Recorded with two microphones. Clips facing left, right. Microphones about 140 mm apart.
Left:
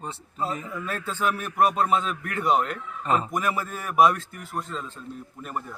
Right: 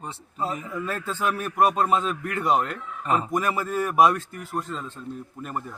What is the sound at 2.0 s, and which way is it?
A man's voice, centre (ahead or behind).